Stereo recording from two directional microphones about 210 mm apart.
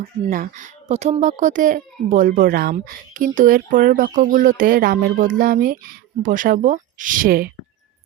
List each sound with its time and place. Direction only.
0.3 s a child's voice: 40° right (ahead or behind)